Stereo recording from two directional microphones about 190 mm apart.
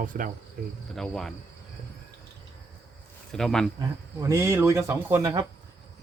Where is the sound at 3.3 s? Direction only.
5° left (ahead or behind).